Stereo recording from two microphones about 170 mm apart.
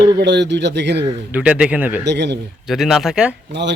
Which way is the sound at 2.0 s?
85° right.